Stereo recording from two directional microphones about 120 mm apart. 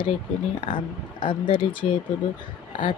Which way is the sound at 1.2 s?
45° left (ahead or behind).